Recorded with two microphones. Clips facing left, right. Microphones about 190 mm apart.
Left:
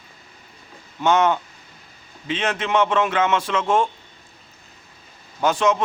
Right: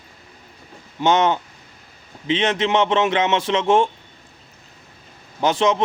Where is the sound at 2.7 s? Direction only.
30° right (ahead or behind).